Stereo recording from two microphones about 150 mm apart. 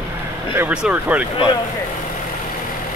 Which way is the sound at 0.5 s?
10° right (ahead or behind).